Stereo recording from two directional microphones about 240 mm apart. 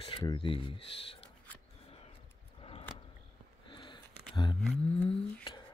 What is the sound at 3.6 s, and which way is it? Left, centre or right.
Sniff, centre.